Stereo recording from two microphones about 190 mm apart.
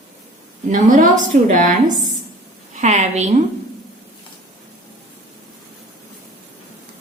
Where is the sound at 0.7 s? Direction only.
40° right (ahead or behind).